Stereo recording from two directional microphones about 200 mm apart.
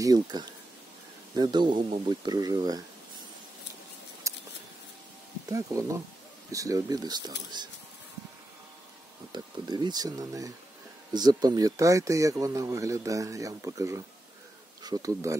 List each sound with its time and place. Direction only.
0.0 s speech: 20° right (ahead or behind)
4.2 s scissors: 15° right (ahead or behind)
5.5 s speech: 15° right (ahead or behind)
9.3 s speech: 20° right (ahead or behind)